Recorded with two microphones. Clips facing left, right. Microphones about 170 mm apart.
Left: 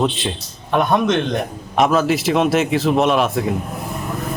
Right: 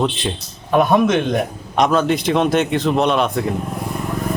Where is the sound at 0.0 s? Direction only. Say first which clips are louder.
Even; centre (ahead or behind).